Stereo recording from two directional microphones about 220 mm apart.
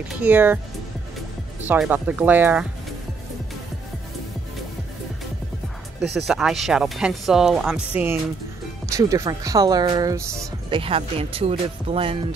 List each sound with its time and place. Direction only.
0.2 s speech: 10° right (ahead or behind)
1.6 s speech: 10° right (ahead or behind)
6.2 s speech: centre (ahead or behind)
10.8 s speech: 25° right (ahead or behind)